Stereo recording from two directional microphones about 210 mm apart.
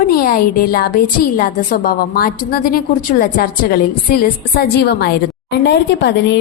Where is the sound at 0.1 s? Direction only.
45° left (ahead or behind).